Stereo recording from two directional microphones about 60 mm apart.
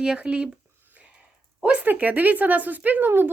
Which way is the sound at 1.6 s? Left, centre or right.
Right.